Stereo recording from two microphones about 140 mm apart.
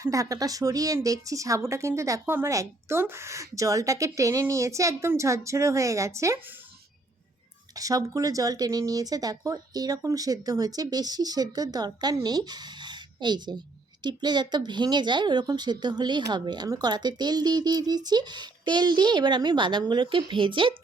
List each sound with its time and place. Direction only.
0.0 s speech: 25° right (ahead or behind)
7.8 s speech: 25° right (ahead or behind)